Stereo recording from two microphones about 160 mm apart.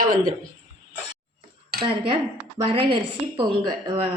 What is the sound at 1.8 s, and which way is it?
A woman's voice, 35° right (ahead or behind).